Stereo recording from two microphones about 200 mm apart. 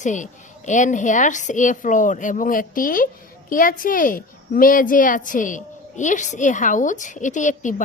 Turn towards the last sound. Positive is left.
turn(degrees=40)  # may be behind; listen again after turning